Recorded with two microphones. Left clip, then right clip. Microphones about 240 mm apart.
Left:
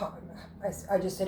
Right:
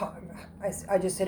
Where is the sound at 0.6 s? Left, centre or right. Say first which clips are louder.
Right 2 dB; right.